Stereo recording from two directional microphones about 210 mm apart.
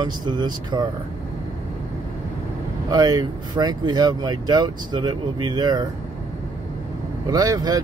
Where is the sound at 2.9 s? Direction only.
20° right (ahead or behind).